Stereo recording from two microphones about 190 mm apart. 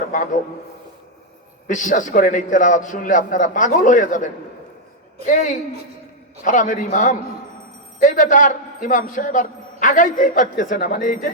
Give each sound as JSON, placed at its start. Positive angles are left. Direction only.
{"t": 1.6, "sound": "a man's voice", "side_deg": 40}